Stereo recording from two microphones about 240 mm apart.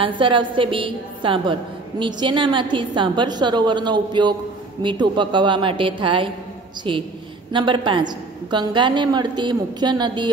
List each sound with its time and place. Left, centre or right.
0.2 s a woman's voice: right